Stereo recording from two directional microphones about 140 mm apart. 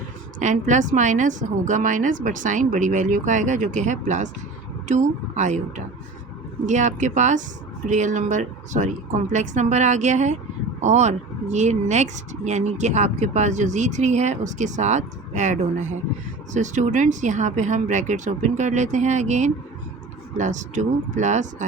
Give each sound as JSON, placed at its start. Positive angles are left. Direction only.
{"t": 0.3, "sound": "speech", "side_deg": -65}